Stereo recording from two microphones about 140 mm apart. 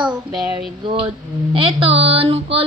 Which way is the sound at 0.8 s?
40° right (ahead or behind).